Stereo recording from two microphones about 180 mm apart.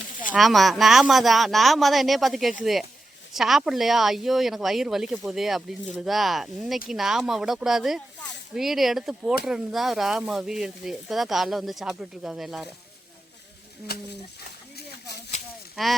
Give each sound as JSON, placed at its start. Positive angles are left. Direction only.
{"t": 0.3, "sound": "speech", "side_deg": 0}
{"t": 13.9, "sound": "speech", "side_deg": 65}
{"t": 15.7, "sound": "speech", "side_deg": 0}